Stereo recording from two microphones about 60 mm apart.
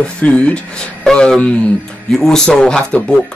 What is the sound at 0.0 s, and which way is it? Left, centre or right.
A man's voice, centre.